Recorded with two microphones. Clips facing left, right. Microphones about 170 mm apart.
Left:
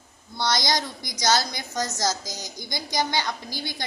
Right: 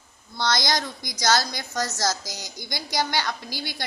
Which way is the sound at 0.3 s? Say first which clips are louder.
Even; 15° left (ahead or behind).